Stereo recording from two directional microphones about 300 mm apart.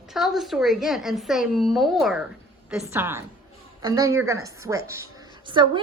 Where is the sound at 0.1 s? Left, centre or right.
Centre.